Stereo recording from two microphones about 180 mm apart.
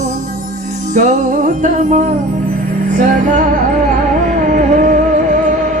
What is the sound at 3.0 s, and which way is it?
Music, 45° right (ahead or behind).